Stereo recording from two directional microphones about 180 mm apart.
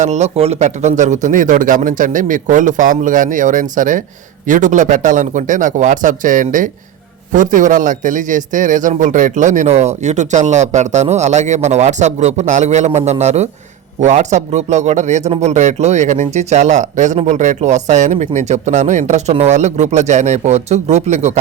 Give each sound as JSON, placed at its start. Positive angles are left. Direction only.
{"t": 0.0, "sound": "a man's voice", "side_deg": -40}